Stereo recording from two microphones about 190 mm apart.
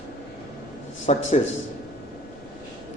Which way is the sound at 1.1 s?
35° left (ahead or behind).